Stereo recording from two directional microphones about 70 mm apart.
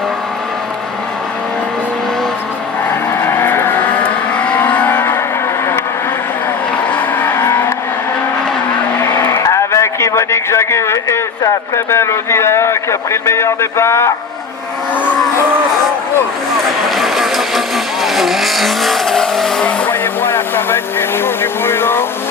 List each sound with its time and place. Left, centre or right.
3.2 s vehicle: left
4.4 s vehicle: centre
6.9 s music: left
9.4 s a sound: left
16.9 s vehicle: centre
19.9 s vehicle: left